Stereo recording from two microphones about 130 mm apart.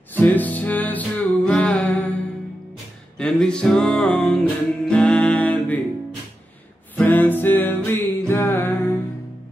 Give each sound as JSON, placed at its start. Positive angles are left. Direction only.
{"t": 0.1, "sound": "music", "side_deg": 15}
{"t": 3.2, "sound": "music", "side_deg": 5}
{"t": 7.0, "sound": "music", "side_deg": 15}